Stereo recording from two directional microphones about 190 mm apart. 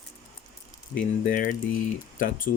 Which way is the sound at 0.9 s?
45° left (ahead or behind).